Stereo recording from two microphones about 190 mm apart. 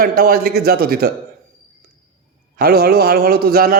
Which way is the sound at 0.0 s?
50° right (ahead or behind).